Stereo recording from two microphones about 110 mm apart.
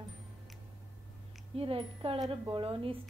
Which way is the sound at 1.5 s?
55° right (ahead or behind).